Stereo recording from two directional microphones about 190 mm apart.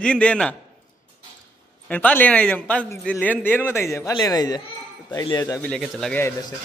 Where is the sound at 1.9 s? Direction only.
10° left (ahead or behind).